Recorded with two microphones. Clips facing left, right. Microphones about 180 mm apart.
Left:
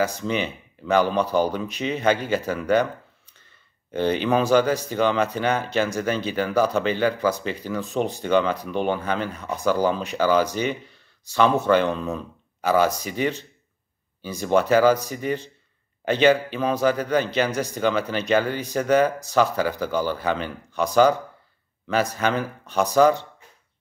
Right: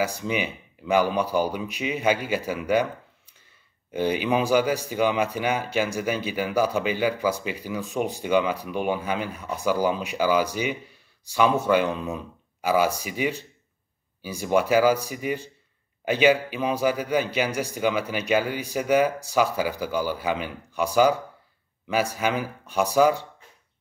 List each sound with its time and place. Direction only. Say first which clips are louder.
0.0 s speech: left 2 dB; 10° right (ahead or behind)